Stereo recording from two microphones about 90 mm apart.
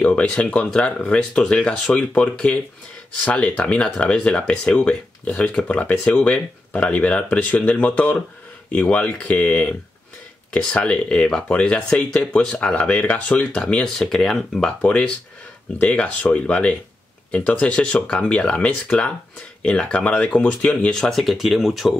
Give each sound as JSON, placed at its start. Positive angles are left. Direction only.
{"t": 0.0, "sound": "speech", "side_deg": 10}